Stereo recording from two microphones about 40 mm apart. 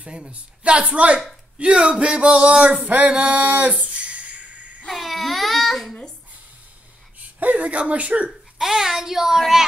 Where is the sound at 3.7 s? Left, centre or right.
Right.